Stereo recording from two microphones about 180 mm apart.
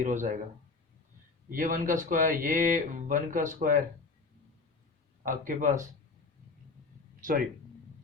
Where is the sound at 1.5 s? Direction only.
50° right (ahead or behind).